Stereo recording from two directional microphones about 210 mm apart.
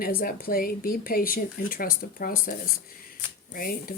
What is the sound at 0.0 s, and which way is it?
Speech, 45° left (ahead or behind).